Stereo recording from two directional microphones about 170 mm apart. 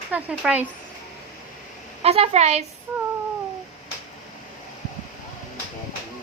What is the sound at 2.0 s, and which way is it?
Speech, 35° right (ahead or behind).